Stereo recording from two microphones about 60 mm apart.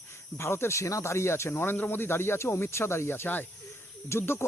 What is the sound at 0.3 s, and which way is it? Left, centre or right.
Speech, left.